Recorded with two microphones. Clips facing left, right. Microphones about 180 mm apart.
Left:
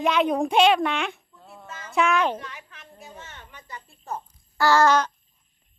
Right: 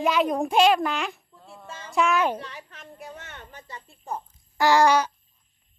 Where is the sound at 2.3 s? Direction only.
35° right (ahead or behind).